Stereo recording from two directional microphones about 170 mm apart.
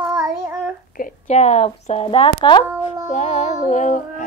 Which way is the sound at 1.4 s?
40° left (ahead or behind).